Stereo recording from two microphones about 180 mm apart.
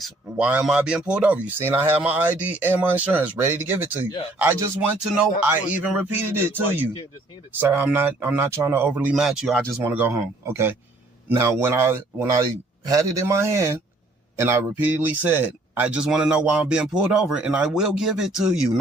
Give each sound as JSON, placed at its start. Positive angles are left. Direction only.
{"t": 0.0, "sound": "speech", "side_deg": -10}
{"t": 9.8, "sound": "speech", "side_deg": -10}